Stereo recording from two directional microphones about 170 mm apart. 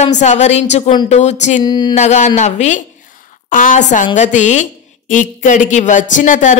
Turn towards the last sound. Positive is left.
turn(degrees=50)  # may be behind; listen again after turning